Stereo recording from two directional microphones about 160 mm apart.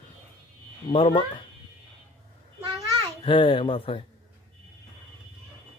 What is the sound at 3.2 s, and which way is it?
Speech, 30° left (ahead or behind).